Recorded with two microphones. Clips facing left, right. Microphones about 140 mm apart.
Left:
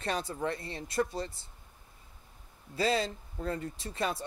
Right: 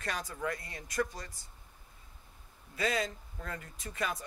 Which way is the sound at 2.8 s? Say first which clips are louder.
Left 3 dB; 30° left (ahead or behind).